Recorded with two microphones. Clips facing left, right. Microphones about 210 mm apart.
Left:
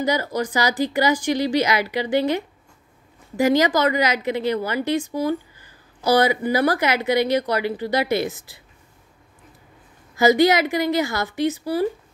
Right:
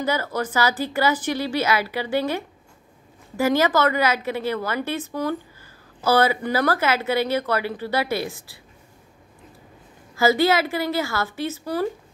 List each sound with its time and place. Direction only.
0.0 s speech: 15° left (ahead or behind)
10.1 s speech: 15° left (ahead or behind)